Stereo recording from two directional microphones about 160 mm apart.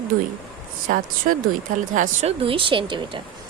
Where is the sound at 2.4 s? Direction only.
35° right (ahead or behind).